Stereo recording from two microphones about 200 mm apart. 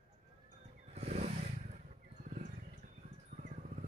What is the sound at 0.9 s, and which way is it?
Wild animals, 35° right (ahead or behind).